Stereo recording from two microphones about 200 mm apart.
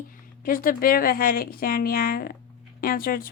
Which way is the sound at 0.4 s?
45° left (ahead or behind).